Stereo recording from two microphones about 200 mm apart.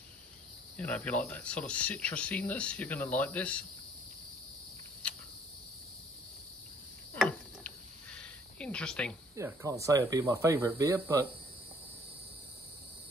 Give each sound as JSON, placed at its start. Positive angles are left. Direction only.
{"t": 0.7, "sound": "speech", "side_deg": 5}
{"t": 7.2, "sound": "a sound", "side_deg": 5}
{"t": 9.3, "sound": "speech", "side_deg": -15}